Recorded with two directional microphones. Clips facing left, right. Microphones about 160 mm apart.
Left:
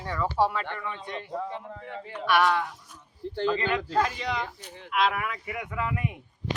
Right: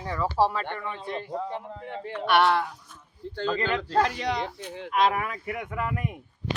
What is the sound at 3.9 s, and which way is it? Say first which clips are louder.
Speech: right 2 dB; 40° right (ahead or behind).